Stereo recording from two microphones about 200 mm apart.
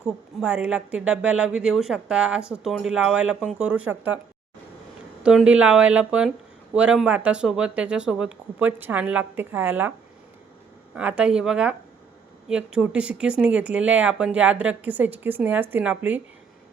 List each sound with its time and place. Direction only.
0.0 s a woman's voice: 5° right (ahead or behind)
5.2 s a woman's voice: 5° right (ahead or behind)
10.9 s a woman's voice: 5° right (ahead or behind)